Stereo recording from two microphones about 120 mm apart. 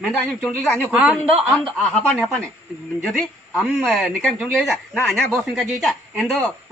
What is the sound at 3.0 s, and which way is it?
A woman's voice, 5° left (ahead or behind).